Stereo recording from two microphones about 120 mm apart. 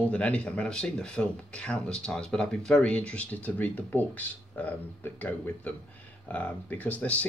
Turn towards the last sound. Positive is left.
turn(degrees=10)  # may be behind; listen again after turning